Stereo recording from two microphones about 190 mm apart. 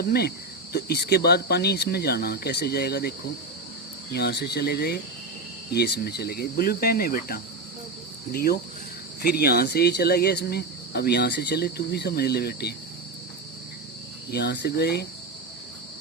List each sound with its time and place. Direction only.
0.0 s speech: 55° left (ahead or behind)
14.3 s speech: 60° left (ahead or behind)